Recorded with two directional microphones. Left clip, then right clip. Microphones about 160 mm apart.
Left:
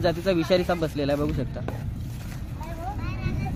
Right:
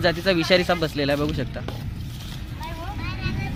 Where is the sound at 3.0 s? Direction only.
65° left (ahead or behind).